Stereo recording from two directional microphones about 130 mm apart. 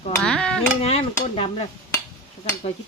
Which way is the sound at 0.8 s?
50° left (ahead or behind).